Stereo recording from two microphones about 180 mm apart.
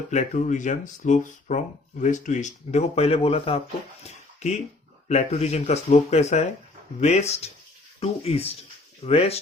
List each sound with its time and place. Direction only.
0.1 s speech: 45° left (ahead or behind)
4.0 s a sound: 40° left (ahead or behind)
5.0 s speech: 40° left (ahead or behind)